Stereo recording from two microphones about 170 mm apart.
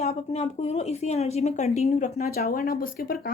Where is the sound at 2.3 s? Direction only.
60° left (ahead or behind).